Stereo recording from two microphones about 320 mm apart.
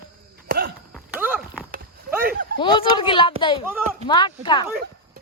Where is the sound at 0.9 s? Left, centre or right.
Centre.